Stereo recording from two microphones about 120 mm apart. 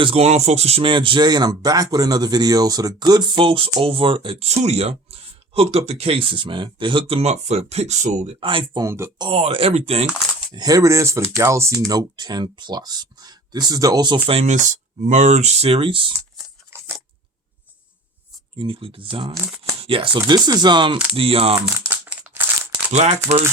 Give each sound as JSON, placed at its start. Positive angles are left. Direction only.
{"t": 0.0, "sound": "speech", "side_deg": -55}
{"t": 4.4, "sound": "speech", "side_deg": -65}
{"t": 7.2, "sound": "speech", "side_deg": -65}
{"t": 8.4, "sound": "speech", "side_deg": -45}
{"t": 8.8, "sound": "speech", "side_deg": -25}
{"t": 9.3, "sound": "speech", "side_deg": -55}
{"t": 10.5, "sound": "speech", "side_deg": -35}
{"t": 11.9, "sound": "speech", "side_deg": -35}
{"t": 14.4, "sound": "speech", "side_deg": -90}
{"t": 16.7, "sound": "scissors", "side_deg": -20}
{"t": 18.5, "sound": "speech", "side_deg": -45}
{"t": 21.2, "sound": "speech", "side_deg": -50}
{"t": 21.8, "sound": "crumpling", "side_deg": -15}
{"t": 23.0, "sound": "speech", "side_deg": -60}